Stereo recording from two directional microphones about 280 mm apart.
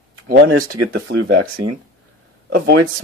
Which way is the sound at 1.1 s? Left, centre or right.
Right.